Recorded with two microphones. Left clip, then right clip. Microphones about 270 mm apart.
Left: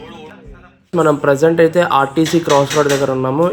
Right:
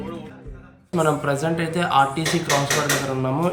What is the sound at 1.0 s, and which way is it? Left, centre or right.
Speech, centre.